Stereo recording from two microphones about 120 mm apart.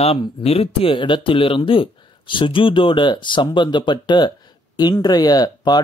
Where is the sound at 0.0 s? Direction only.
55° left (ahead or behind).